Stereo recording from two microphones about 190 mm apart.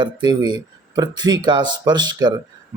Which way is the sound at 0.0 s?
25° right (ahead or behind).